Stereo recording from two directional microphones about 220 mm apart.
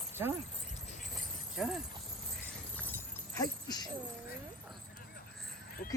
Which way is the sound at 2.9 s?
15° left (ahead or behind).